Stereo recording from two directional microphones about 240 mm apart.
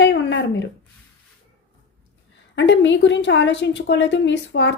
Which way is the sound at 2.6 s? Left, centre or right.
Left.